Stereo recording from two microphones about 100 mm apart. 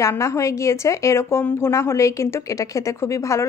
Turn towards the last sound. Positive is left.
turn(degrees=30)  # may be behind; listen again after turning